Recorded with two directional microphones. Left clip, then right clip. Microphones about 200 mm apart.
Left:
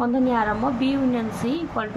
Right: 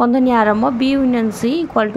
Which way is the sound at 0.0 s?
55° right (ahead or behind).